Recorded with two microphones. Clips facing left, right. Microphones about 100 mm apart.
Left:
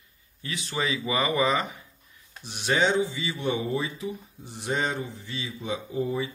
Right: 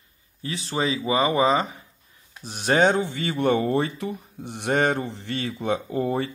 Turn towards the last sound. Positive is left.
turn(degrees=-65)  # may be behind; listen again after turning